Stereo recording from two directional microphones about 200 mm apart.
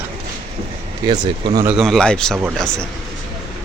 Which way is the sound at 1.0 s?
20° right (ahead or behind).